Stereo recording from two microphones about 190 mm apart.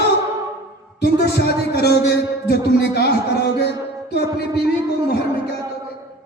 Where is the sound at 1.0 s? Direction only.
60° left (ahead or behind).